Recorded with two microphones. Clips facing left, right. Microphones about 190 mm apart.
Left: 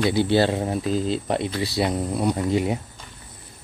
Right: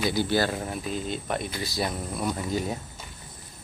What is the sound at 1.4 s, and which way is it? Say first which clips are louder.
Speech: left 7 dB; 75° left (ahead or behind).